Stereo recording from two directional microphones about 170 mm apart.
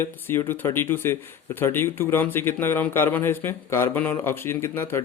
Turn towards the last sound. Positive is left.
turn(degrees=15)  # may be behind; listen again after turning